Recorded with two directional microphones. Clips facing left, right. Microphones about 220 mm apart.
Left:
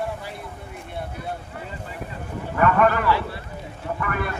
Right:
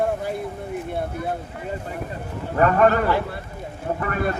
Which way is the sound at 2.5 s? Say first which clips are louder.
Right 2 dB; 35° right (ahead or behind).